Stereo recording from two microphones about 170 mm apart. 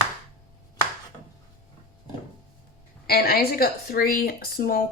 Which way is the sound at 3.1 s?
65° left (ahead or behind).